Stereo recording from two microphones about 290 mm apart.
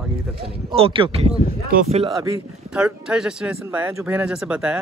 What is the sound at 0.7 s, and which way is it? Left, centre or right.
Speech, centre.